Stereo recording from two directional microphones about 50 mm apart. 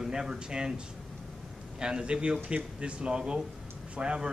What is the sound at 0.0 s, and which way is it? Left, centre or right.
Speech, centre.